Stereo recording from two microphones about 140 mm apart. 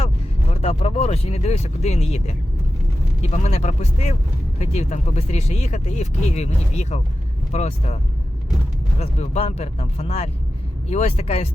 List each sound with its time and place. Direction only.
0.5 s speech: 45° left (ahead or behind)
9.0 s speech: 50° left (ahead or behind)